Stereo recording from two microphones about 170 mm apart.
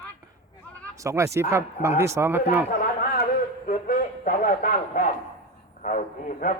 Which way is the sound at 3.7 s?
55° left (ahead or behind).